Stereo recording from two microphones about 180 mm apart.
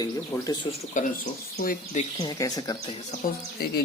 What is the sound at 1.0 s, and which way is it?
Speech, 45° left (ahead or behind).